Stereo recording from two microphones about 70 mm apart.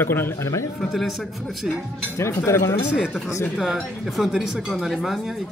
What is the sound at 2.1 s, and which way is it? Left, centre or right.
Speech, left.